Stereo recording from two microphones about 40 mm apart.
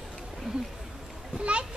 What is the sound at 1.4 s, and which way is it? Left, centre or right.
Children playing, right.